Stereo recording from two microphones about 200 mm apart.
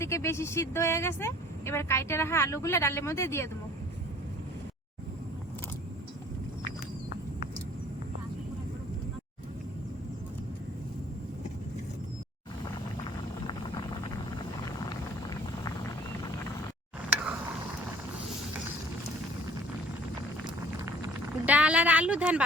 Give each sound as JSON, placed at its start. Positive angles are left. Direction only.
{"t": 0.0, "sound": "speech", "side_deg": 15}
{"t": 14.8, "sound": "vehicle", "side_deg": 20}
{"t": 20.7, "sound": "a sound", "side_deg": -15}